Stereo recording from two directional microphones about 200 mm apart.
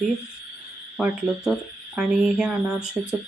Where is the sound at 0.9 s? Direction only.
5° right (ahead or behind).